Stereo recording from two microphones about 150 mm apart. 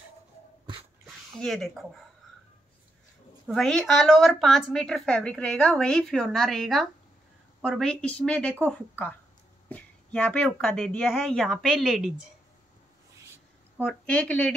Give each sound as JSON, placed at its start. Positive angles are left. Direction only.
{"t": 1.0, "sound": "a sound", "side_deg": 0}
{"t": 3.4, "sound": "a woman's voice", "side_deg": 0}
{"t": 13.7, "sound": "a woman's voice", "side_deg": 5}